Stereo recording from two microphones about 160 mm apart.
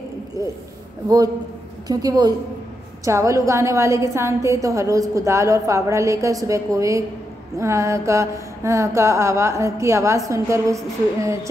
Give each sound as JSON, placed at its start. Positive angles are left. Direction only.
{"t": 1.0, "sound": "a woman's voice", "side_deg": -25}